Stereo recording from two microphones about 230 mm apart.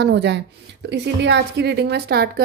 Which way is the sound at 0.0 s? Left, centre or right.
Right.